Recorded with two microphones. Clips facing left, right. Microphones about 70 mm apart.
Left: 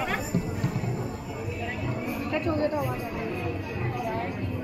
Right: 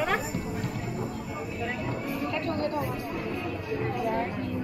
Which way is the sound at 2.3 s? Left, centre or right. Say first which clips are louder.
Left 5 dB; left.